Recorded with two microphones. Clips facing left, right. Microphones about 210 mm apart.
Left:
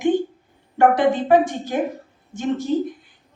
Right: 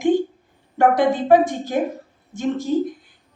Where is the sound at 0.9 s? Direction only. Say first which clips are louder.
Right 1 dB; 45° right (ahead or behind).